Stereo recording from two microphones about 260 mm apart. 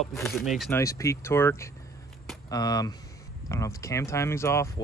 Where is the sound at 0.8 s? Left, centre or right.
Centre.